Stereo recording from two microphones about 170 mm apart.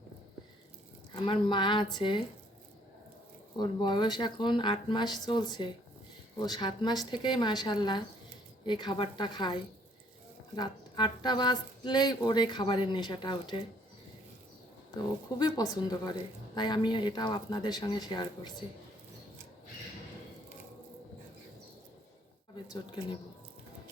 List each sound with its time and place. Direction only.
1.1 s speech: 30° left (ahead or behind)
3.6 s speech: 25° left (ahead or behind)
14.9 s speech: 25° left (ahead or behind)
22.5 s speech: 25° left (ahead or behind)